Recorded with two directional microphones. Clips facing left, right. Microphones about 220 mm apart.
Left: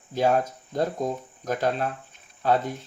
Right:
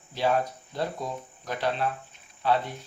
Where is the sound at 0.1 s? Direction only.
45° left (ahead or behind).